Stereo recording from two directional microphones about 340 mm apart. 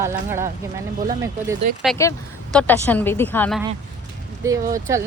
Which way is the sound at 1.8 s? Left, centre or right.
Centre.